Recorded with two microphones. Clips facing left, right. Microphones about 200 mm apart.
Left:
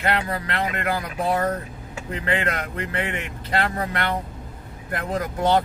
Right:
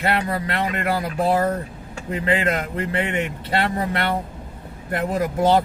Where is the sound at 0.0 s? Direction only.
30° right (ahead or behind).